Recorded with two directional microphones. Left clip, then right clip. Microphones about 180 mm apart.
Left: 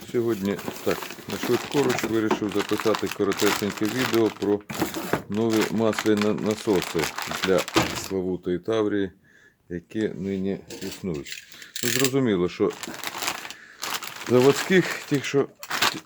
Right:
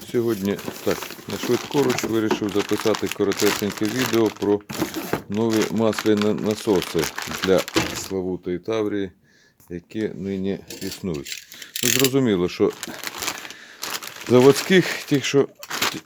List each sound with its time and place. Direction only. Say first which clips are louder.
0.1 s speech: right 2 dB; 30° right (ahead or behind)
1.5 s speech: right 2 dB; centre (ahead or behind)
1.8 s speech: right 2 dB; 20° right (ahead or behind)
10.2 s speech: right 2 dB; 25° right (ahead or behind)
10.8 s coin: right 3 dB; 50° right (ahead or behind)
11.7 s speech: right 4 dB; 40° right (ahead or behind)
12.2 s speech: right 3 dB; 25° right (ahead or behind)
12.8 s a sound: right 1 dB; 15° right (ahead or behind)
13.8 s crumpling: right 1 dB; 20° right (ahead or behind)
14.4 s speech: right 4 dB; 30° right (ahead or behind)
15.7 s a sound: left 1 dB; 15° right (ahead or behind)